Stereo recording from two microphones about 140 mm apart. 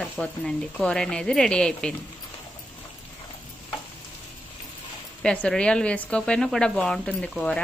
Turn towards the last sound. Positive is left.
turn(degrees=5)  # may be behind; listen again after turning